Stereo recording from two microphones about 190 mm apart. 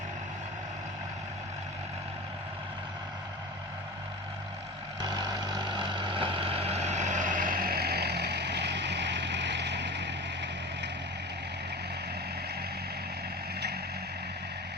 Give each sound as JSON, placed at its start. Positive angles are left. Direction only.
{"t": 4.9, "sound": "vehicle", "side_deg": -20}